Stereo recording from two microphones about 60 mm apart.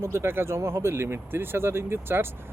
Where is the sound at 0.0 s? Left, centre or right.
Right.